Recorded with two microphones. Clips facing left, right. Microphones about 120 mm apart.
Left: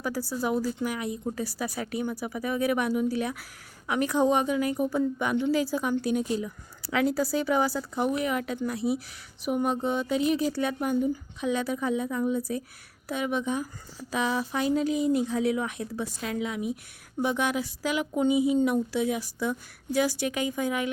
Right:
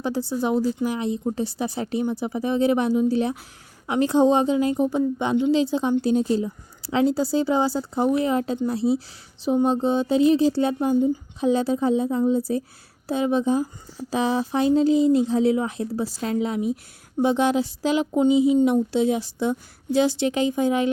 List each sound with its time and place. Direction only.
0.0 s a woman's voice: 25° right (ahead or behind)